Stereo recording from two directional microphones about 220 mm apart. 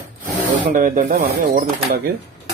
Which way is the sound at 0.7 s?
35° right (ahead or behind).